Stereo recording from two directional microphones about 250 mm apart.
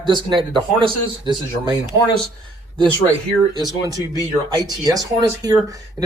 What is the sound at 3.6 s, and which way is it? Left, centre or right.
Speech, centre.